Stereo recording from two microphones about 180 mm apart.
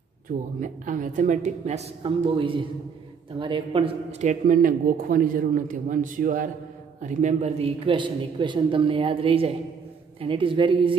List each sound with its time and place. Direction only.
0.6 s a man's voice: 45° right (ahead or behind); by 11.0 s 30° right (ahead or behind)